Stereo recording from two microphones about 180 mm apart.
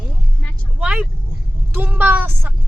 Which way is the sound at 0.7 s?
5° right (ahead or behind).